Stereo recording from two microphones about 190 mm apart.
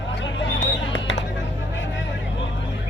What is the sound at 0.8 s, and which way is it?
Fireworks, 70° left (ahead or behind).